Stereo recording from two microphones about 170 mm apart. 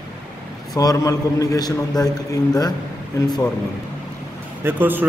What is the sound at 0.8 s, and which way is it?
A man's voice, 20° left (ahead or behind).